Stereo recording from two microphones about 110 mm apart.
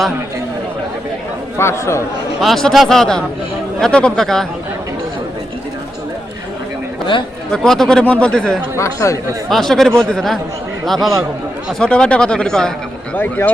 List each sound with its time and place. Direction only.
1.5 s speech: 25° left (ahead or behind)
2.4 s a man's voice: centre (ahead or behind)
7.5 s speech: 5° left (ahead or behind)
8.7 s speech: 25° left (ahead or behind)
9.5 s a man's voice: 5° left (ahead or behind)